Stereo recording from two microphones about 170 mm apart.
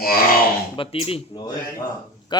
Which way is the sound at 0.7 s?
30° left (ahead or behind).